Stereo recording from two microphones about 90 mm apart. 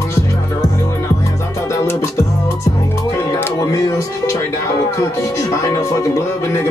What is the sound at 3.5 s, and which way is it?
Speech, 45° left (ahead or behind).